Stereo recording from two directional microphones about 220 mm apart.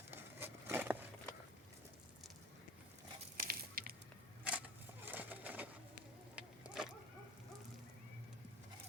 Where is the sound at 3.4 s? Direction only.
40° right (ahead or behind).